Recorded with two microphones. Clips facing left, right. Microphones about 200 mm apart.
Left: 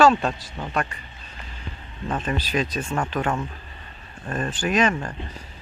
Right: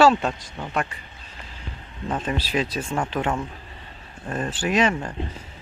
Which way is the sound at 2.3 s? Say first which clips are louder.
Left 1 dB; 15° right (ahead or behind).